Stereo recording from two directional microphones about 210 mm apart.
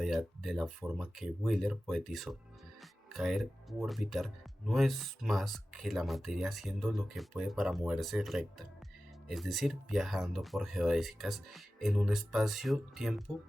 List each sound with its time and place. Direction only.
0.0 s speech: centre (ahead or behind)